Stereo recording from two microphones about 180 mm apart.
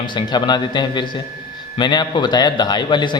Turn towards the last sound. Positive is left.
turn(degrees=25)  # may be behind; listen again after turning